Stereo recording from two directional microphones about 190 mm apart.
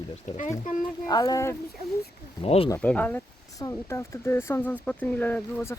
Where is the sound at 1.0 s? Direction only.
20° left (ahead or behind).